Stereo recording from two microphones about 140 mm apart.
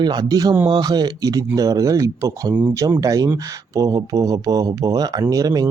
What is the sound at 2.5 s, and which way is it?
Speech, 10° right (ahead or behind).